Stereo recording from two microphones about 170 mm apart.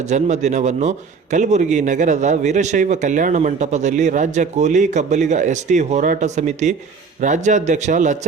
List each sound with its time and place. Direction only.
0.1 s a man's voice: 45° right (ahead or behind)